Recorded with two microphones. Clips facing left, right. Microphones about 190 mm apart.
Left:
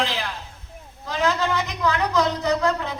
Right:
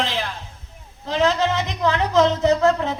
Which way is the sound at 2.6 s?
45° right (ahead or behind).